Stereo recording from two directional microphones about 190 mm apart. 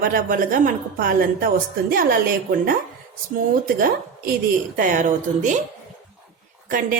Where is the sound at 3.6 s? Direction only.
50° right (ahead or behind).